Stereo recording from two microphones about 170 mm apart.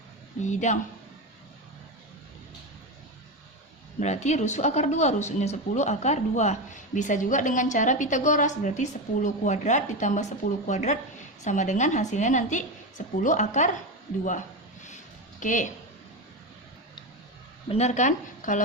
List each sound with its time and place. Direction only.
0.4 s speech: 45° left (ahead or behind)
4.0 s speech: 45° left (ahead or behind)
14.8 s a sound: 45° left (ahead or behind)
17.7 s speech: 40° left (ahead or behind)